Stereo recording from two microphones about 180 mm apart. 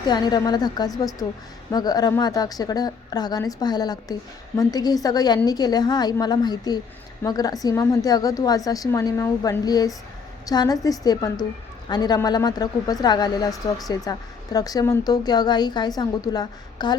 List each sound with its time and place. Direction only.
0.0 s a woman's voice: 25° left (ahead or behind)